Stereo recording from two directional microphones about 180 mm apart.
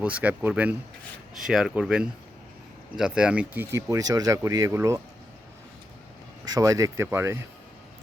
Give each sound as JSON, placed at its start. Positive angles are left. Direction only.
{"t": 0.0, "sound": "speech", "side_deg": -10}
{"t": 6.4, "sound": "speech", "side_deg": -20}